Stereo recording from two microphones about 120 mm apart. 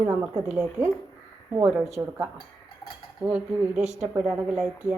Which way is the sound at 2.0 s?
15° right (ahead or behind).